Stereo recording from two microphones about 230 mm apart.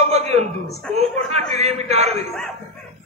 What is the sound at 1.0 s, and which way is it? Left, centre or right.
Speech, right.